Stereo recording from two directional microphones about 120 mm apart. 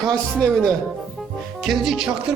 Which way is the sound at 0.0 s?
5° left (ahead or behind).